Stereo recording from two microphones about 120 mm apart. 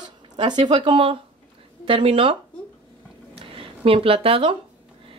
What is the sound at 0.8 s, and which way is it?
Speech, 50° right (ahead or behind).